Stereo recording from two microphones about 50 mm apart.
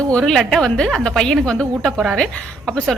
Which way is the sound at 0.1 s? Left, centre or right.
Centre.